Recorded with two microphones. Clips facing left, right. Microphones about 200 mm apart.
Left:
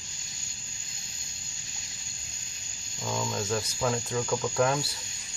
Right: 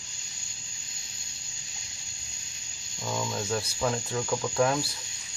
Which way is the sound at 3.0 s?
Centre (ahead or behind).